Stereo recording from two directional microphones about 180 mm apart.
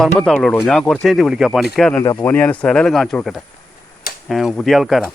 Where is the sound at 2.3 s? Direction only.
10° left (ahead or behind).